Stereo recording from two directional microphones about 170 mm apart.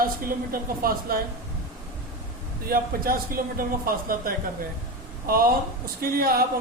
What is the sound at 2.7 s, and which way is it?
A man's voice, 55° right (ahead or behind).